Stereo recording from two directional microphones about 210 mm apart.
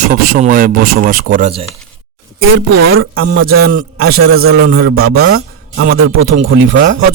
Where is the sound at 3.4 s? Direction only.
45° right (ahead or behind).